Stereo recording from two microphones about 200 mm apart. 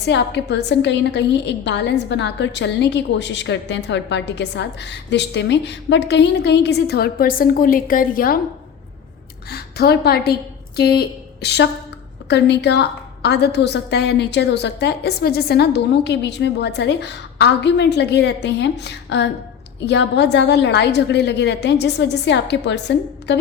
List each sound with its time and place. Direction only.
0.0 s a woman's voice: 60° left (ahead or behind)
9.5 s a woman's voice: 50° left (ahead or behind)